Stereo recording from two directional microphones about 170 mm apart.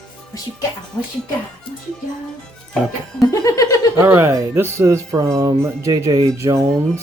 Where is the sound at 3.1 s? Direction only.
20° left (ahead or behind).